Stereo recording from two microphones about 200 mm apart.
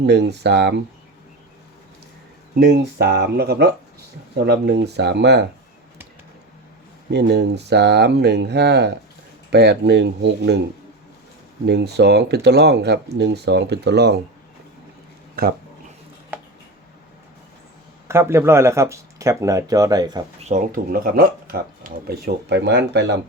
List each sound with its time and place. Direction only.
0.0 s speech: 55° right (ahead or behind)
2.6 s speech: 55° right (ahead or behind)
7.1 s speech: 55° right (ahead or behind)
11.6 s speech: 55° right (ahead or behind)
15.4 s speech: 50° right (ahead or behind)
16.3 s a sound: 10° right (ahead or behind)
18.1 s speech: 15° right (ahead or behind)
20.4 s speech: 40° right (ahead or behind); by 23.2 s 60° right (ahead or behind)